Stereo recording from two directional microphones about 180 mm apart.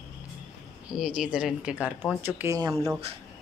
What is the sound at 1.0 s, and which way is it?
Speech, 5° right (ahead or behind).